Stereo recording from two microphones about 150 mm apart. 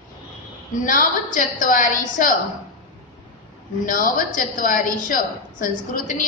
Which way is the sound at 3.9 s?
65° left (ahead or behind).